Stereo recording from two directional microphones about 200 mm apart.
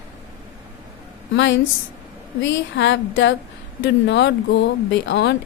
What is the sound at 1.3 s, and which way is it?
Speech, 65° left (ahead or behind).